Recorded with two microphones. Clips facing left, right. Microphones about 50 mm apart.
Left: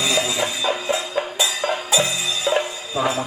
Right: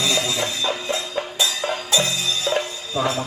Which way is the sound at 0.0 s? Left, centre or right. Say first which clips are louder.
Left 1 dB; centre.